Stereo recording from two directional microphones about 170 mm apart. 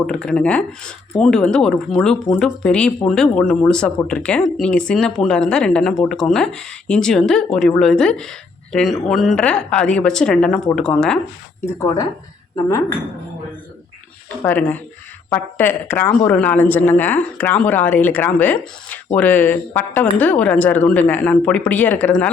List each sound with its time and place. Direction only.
0.1 s speech: 5° left (ahead or behind)
11.6 s speech: 20° left (ahead or behind)
14.4 s speech: 10° left (ahead or behind)